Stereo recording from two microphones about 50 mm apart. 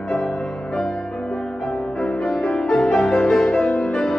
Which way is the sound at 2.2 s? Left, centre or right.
Centre.